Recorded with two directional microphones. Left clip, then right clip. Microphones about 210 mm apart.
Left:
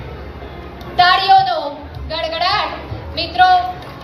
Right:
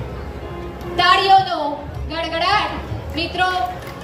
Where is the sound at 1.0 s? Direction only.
55° right (ahead or behind).